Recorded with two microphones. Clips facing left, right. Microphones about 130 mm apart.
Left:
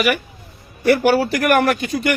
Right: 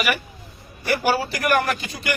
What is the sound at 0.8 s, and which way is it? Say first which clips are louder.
Speech: left 7 dB; 55° left (ahead or behind).